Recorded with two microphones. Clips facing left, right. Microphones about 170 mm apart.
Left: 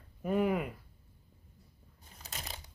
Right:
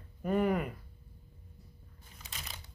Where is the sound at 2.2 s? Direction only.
40° left (ahead or behind).